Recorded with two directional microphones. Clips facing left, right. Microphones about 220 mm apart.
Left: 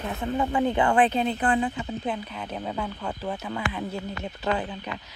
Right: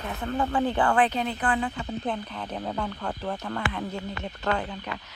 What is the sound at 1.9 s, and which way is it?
Speech, 5° left (ahead or behind).